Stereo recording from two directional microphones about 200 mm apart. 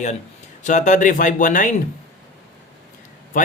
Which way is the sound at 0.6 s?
40° left (ahead or behind).